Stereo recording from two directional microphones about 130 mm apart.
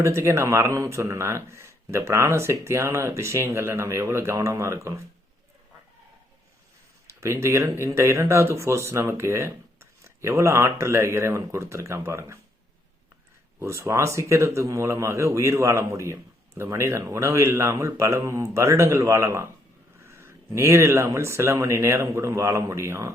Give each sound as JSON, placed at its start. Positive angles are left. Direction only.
{"t": 0.0, "sound": "speech", "side_deg": -20}
{"t": 7.1, "sound": "speech", "side_deg": -20}
{"t": 13.6, "sound": "speech", "side_deg": -20}